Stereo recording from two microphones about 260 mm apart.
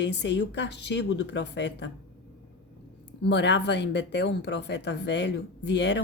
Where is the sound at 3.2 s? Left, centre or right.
Left.